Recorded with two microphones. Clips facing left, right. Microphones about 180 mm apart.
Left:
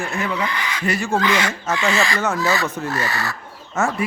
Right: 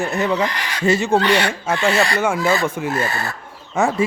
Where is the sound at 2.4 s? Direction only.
25° right (ahead or behind).